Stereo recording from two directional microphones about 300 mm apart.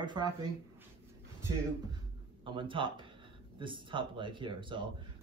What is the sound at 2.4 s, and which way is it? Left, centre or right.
A man's voice, centre.